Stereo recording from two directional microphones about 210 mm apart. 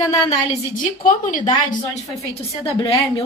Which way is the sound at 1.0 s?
40° left (ahead or behind).